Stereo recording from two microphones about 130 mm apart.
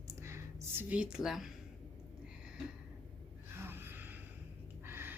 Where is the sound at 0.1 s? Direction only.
20° right (ahead or behind); by 1.5 s 5° right (ahead or behind).